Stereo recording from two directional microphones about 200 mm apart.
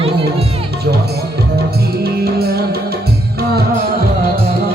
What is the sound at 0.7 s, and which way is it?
Music, 55° right (ahead or behind).